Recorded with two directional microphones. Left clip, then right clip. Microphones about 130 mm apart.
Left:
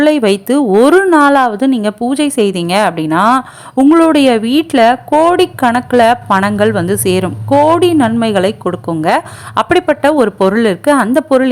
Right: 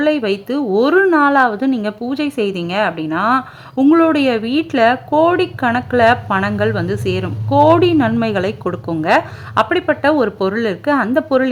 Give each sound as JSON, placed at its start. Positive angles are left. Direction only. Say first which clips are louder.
{"t": 0.0, "sound": "a woman's voice", "louder": "left 6 dB", "side_deg": 35}